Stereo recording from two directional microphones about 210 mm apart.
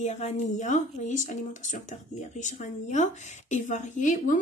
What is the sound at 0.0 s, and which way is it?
Speech, 35° left (ahead or behind).